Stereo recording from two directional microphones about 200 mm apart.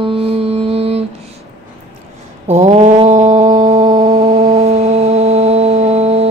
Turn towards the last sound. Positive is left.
turn(degrees=-30)  # may be behind; listen again after turning